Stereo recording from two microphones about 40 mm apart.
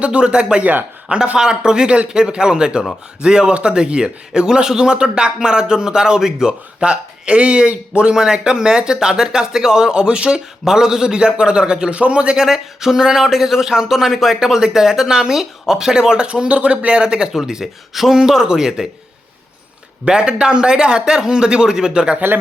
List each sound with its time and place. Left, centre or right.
0.0 s speech: right
8.1 s speech: centre
12.4 s speech: centre; by 17.0 s right
17.0 s speech: centre
20.1 s speech: right